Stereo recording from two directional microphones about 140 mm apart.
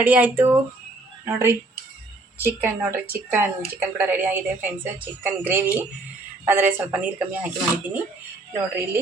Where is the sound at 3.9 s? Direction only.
15° right (ahead or behind).